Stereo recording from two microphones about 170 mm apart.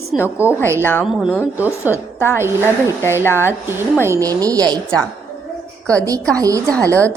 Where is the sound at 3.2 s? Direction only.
15° left (ahead or behind).